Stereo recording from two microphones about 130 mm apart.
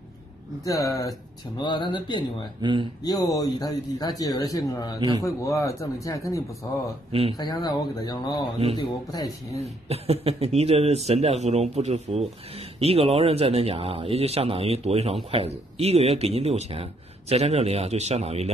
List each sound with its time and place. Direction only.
0.7 s speech: 25° left (ahead or behind)
2.6 s speech: 40° right (ahead or behind)
3.0 s speech: 30° left (ahead or behind)
7.1 s speech: 50° right (ahead or behind)
7.3 s speech: 35° left (ahead or behind)
9.8 s speech: 50° right (ahead or behind)